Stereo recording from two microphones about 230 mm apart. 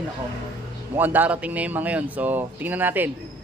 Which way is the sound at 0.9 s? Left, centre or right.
Centre.